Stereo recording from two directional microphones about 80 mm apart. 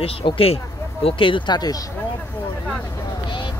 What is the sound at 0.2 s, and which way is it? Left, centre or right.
Speech, left.